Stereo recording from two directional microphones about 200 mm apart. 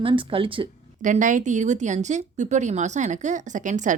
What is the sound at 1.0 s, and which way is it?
Speech, 40° right (ahead or behind).